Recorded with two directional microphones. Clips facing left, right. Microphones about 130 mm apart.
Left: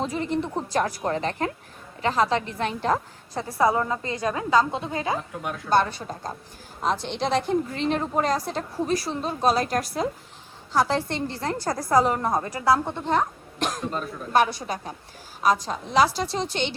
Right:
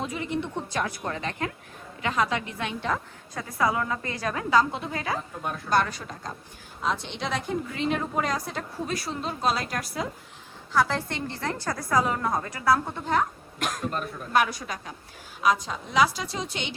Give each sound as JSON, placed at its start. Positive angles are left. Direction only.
{"t": 0.0, "sound": "a woman's voice", "side_deg": 35}
{"t": 3.6, "sound": "a woman's voice", "side_deg": 25}
{"t": 10.7, "sound": "a woman's voice", "side_deg": 30}
{"t": 11.7, "sound": "a woman's voice", "side_deg": 25}